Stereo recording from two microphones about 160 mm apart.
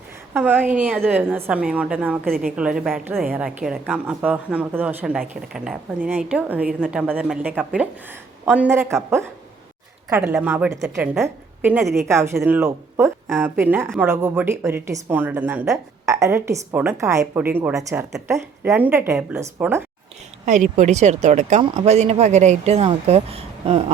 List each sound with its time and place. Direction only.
0.3 s a woman's voice: 10° right (ahead or behind)
20.4 s speech: 50° right (ahead or behind)